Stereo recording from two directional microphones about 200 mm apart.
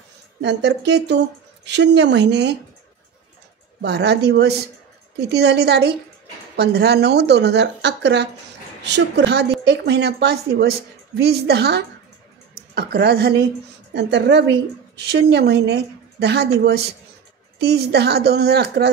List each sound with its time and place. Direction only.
0.4 s a woman's voice: 60° right (ahead or behind)
3.8 s a woman's voice: 55° right (ahead or behind)